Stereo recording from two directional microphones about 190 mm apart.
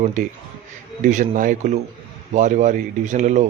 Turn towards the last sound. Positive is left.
turn(degrees=-40)  # may be behind; listen again after turning